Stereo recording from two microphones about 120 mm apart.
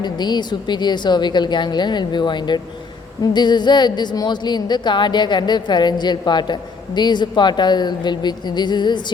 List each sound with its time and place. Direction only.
0.0 s a woman's voice: 35° left (ahead or behind)